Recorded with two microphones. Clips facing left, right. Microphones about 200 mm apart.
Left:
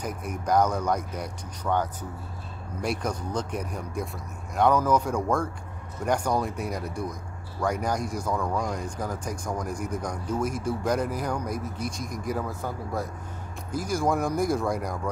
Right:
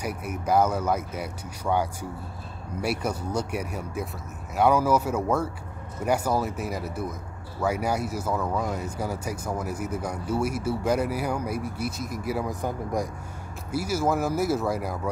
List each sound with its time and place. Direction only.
0.0 s speech: 10° right (ahead or behind)